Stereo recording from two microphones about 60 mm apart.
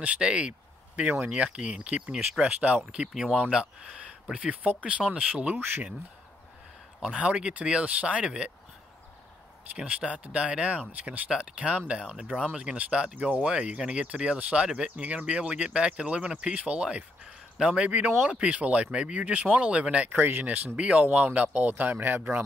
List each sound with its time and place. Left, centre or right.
0.0 s speech: centre
7.0 s speech: centre
9.8 s speech: right
20.2 s speech: right
20.4 s speech: right